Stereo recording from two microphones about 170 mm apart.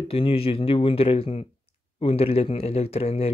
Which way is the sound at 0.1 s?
35° left (ahead or behind).